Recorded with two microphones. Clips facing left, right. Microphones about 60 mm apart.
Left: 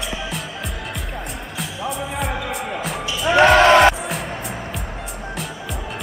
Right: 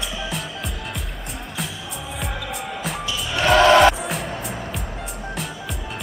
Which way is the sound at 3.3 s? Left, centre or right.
Left.